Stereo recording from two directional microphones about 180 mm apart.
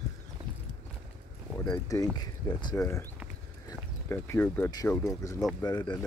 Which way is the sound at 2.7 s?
15° left (ahead or behind).